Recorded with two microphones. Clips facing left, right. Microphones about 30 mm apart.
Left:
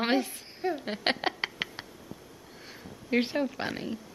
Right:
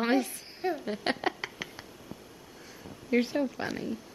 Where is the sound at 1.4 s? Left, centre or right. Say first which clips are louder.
Left 5 dB; left.